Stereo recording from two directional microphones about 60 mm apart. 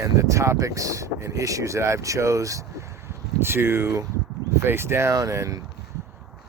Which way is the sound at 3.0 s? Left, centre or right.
Right.